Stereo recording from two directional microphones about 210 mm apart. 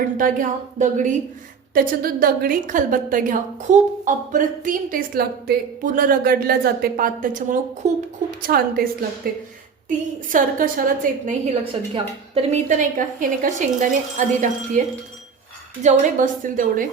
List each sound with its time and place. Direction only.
0.2 s a woman's voice: 40° right (ahead or behind)
8.4 s a woman's voice: 45° right (ahead or behind)
12.3 s a woman's voice: 30° right (ahead or behind)